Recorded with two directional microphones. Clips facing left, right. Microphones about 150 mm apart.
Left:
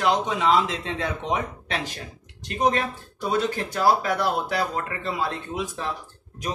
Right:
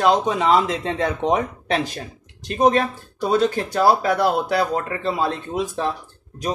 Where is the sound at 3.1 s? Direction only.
35° right (ahead or behind).